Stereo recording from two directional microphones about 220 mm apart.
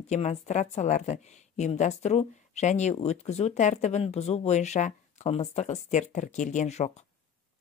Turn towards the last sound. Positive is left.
turn(degrees=30)  # may be behind; listen again after turning